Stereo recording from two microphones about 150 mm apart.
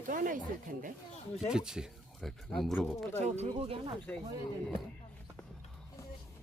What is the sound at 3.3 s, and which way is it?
Speech, 40° right (ahead or behind).